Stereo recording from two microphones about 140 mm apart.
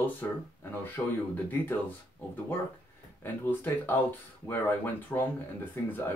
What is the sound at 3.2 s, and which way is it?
Speech, 15° left (ahead or behind).